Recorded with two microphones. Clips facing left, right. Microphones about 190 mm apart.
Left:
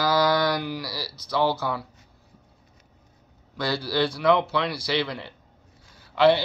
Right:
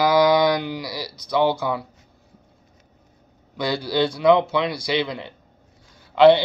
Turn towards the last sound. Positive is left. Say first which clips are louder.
# right 6 dB
turn(degrees=-20)  # may be behind; listen again after turning